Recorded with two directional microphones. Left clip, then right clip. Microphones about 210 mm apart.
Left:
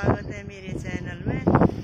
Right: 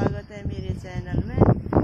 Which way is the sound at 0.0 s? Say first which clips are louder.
Left 2 dB; 15° right (ahead or behind).